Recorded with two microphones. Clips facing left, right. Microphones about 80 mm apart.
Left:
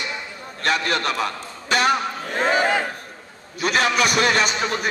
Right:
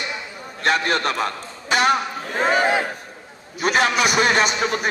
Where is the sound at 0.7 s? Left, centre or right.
Right.